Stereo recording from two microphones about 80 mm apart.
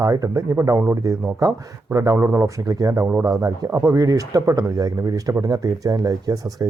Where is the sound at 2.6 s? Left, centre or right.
Right.